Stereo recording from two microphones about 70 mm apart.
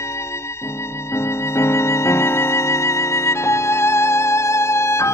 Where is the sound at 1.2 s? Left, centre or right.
Left.